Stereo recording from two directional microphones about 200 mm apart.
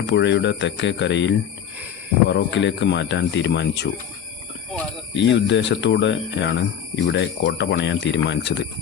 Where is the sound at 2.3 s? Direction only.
65° left (ahead or behind).